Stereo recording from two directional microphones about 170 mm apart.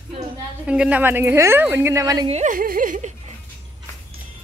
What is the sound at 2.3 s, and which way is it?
Speech, 45° right (ahead or behind).